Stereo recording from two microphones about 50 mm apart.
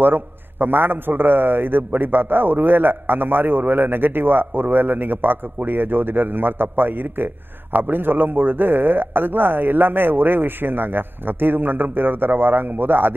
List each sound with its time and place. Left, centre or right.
0.0 s a man's voice: right